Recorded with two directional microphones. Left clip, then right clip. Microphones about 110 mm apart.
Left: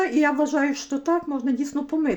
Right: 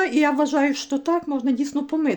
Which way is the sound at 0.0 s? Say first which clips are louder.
Right 1 dB; 15° right (ahead or behind).